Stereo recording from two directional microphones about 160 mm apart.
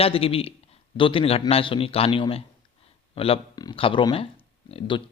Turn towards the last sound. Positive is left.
turn(degrees=35)  # may be behind; listen again after turning